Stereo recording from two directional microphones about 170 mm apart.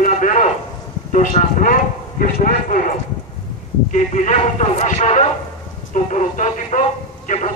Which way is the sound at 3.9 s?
45° left (ahead or behind).